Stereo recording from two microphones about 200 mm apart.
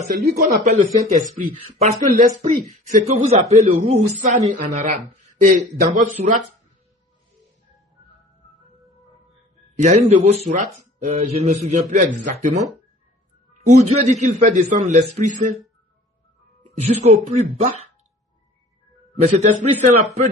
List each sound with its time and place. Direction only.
0.0 s a man's voice: 40° right (ahead or behind)
9.7 s a man's voice: 35° right (ahead or behind)
13.7 s a man's voice: 35° right (ahead or behind)
16.8 s a man's voice: 35° right (ahead or behind)
19.2 s a man's voice: 35° right (ahead or behind)